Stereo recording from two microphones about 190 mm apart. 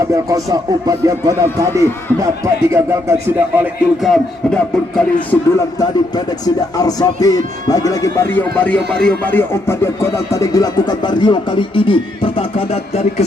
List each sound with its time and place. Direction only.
0.1 s speech: 15° right (ahead or behind); by 5.4 s 5° left (ahead or behind)
6.1 s speech: 20° left (ahead or behind)